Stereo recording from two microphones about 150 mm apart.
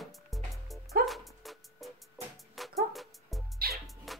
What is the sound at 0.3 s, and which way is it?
Music, centre (ahead or behind).